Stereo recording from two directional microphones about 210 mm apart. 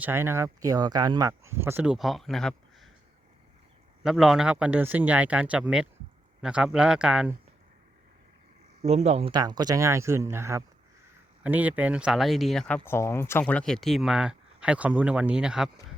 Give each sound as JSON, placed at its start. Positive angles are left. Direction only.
{"t": 0.0, "sound": "speech", "side_deg": -10}
{"t": 4.0, "sound": "speech", "side_deg": 0}
{"t": 8.8, "sound": "speech", "side_deg": -30}